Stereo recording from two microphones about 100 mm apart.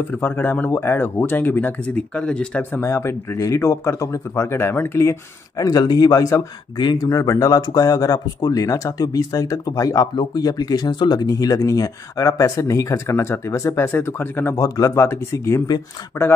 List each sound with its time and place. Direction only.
0.1 s speech: 20° left (ahead or behind)
2.8 s speech: 25° left (ahead or behind)
5.6 s speech: 40° left (ahead or behind)
6.8 s speech: 45° left (ahead or behind)
7.1 s speech: 35° left (ahead or behind)
11.2 s speech: 35° left (ahead or behind)
14.5 s speech: 35° left (ahead or behind)